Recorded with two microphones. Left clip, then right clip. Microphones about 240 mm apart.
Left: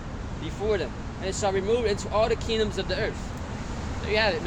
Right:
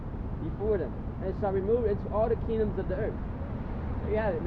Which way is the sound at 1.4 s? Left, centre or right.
Left.